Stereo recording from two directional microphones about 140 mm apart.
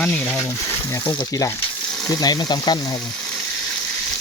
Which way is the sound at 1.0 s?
25° left (ahead or behind).